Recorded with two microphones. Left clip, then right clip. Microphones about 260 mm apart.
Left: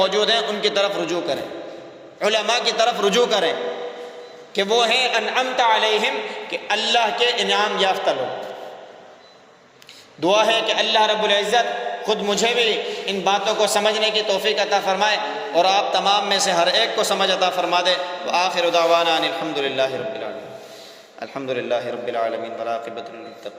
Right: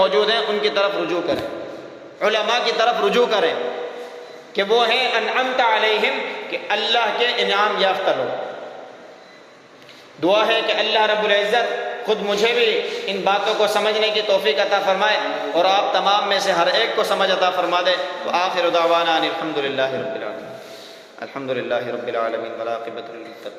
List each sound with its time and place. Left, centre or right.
0.0 s a man's voice: left
4.5 s a man's voice: left
10.2 s a man's voice: left
21.2 s a man's voice: left